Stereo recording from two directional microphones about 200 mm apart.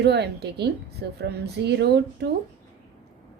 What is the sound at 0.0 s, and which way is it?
Speech, 55° right (ahead or behind).